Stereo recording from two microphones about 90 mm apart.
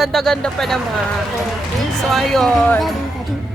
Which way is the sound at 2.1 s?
Centre (ahead or behind).